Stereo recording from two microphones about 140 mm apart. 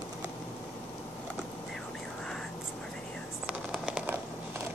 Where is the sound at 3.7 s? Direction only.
10° right (ahead or behind).